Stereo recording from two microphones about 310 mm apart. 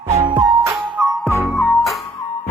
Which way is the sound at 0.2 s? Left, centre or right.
Centre.